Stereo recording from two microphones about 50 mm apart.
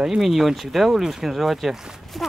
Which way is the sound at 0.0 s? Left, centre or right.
Centre.